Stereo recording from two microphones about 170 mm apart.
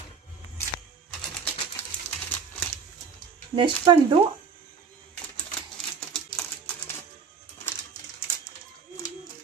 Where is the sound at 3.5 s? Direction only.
30° right (ahead or behind).